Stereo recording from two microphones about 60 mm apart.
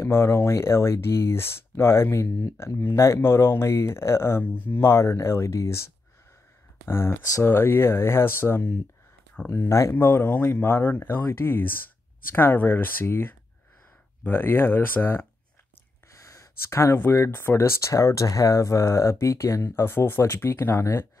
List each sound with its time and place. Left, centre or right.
0.0 s speech: left
4.6 s speech: left
4.8 s speech: left
6.9 s speech: left
10.2 s speech: left
16.1 s speech: left